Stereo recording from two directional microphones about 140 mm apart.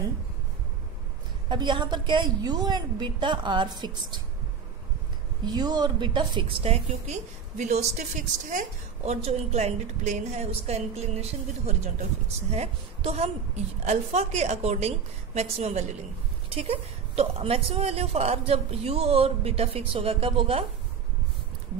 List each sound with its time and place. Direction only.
1.5 s a woman's voice: 35° right (ahead or behind)
5.4 s a woman's voice: 30° right (ahead or behind); by 7.8 s 55° right (ahead or behind)
8.5 s a woman's voice: 65° right (ahead or behind)
9.1 s a woman's voice: 50° right (ahead or behind)